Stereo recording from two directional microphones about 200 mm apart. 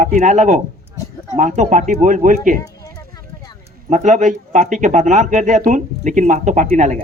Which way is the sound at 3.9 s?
40° right (ahead or behind).